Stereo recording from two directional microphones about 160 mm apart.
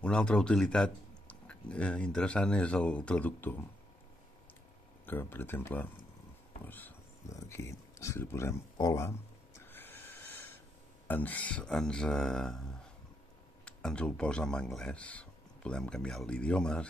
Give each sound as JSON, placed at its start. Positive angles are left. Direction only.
{"t": 0.0, "sound": "speech", "side_deg": 5}
{"t": 5.0, "sound": "speech", "side_deg": 15}
{"t": 6.6, "sound": "a sound", "side_deg": 10}
{"t": 11.1, "sound": "speech", "side_deg": 10}